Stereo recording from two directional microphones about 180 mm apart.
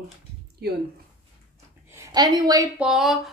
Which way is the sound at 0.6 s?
60° right (ahead or behind).